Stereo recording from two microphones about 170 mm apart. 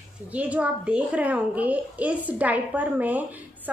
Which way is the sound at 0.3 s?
10° right (ahead or behind).